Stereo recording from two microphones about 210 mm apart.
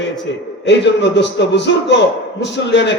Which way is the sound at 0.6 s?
55° left (ahead or behind).